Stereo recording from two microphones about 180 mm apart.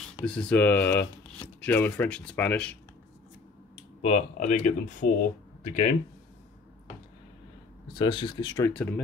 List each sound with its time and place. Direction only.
0.2 s speech: 5° left (ahead or behind)
4.0 s speech: 40° left (ahead or behind)
7.9 s speech: 25° left (ahead or behind); by 9.0 s 10° left (ahead or behind)